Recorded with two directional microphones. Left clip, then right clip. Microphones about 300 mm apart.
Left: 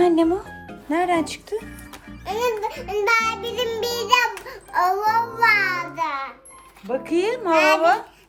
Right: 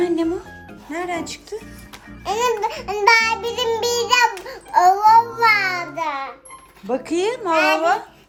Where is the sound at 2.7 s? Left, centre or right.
Centre.